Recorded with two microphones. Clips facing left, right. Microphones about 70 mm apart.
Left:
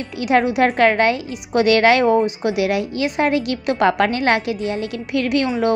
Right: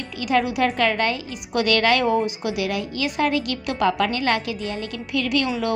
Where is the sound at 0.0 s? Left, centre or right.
Left.